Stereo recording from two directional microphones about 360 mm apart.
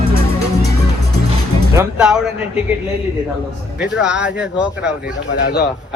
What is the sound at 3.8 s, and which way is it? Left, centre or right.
Speech, centre.